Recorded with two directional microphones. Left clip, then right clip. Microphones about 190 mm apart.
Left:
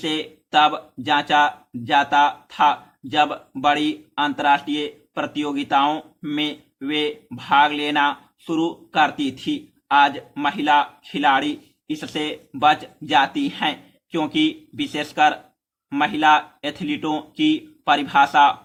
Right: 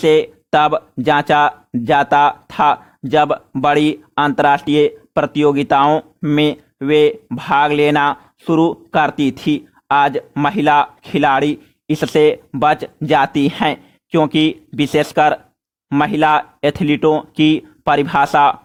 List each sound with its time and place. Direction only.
0.0 s speech: 50° right (ahead or behind)